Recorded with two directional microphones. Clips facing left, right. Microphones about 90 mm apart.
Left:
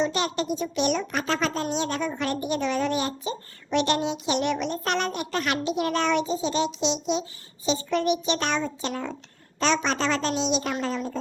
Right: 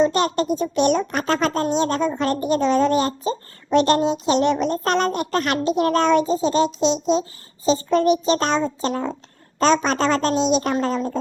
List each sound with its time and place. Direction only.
0.0 s a woman's voice: 45° right (ahead or behind)
2.0 s speech: 25° right (ahead or behind)
2.2 s a child's voice: 45° right (ahead or behind)